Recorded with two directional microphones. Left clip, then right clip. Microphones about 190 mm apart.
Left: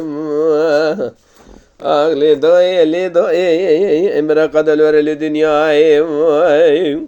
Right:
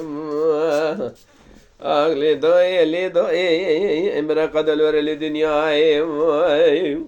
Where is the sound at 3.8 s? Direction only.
45° left (ahead or behind).